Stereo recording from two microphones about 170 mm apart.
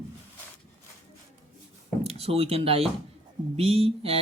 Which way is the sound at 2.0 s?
35° right (ahead or behind).